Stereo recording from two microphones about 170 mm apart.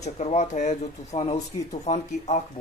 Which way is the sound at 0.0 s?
40° left (ahead or behind).